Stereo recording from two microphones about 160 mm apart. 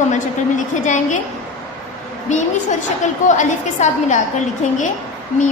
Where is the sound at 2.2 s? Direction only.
50° left (ahead or behind).